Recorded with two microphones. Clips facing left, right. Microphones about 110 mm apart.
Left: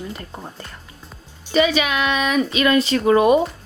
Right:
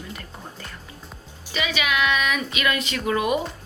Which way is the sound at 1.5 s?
35° left (ahead or behind).